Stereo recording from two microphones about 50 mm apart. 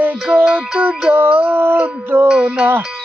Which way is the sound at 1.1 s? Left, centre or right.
Right.